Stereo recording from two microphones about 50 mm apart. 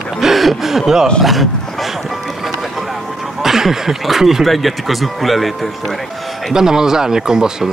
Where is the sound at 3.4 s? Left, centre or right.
Centre.